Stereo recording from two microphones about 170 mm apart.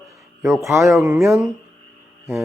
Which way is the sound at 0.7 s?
15° right (ahead or behind).